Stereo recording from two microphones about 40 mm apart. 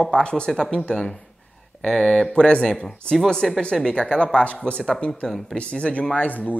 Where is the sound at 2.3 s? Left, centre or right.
Left.